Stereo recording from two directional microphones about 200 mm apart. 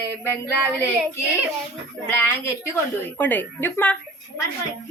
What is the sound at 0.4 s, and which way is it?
A woman's voice, 15° left (ahead or behind).